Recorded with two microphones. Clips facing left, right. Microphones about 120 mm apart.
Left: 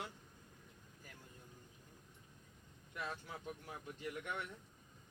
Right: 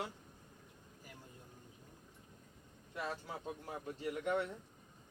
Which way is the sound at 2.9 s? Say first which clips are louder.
Right 4 dB; 30° right (ahead or behind).